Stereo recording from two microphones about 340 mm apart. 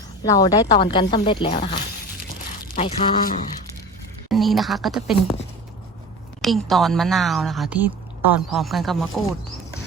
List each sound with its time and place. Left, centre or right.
0.2 s speech: centre
4.3 s a woman's voice: centre
6.4 s a woman's voice: centre